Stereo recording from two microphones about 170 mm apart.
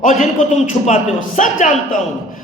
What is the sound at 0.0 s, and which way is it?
A man's voice, 45° left (ahead or behind).